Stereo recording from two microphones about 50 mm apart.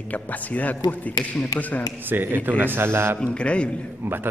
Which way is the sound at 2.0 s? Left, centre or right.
Right.